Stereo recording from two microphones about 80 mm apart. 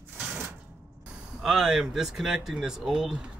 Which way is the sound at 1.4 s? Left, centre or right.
Centre.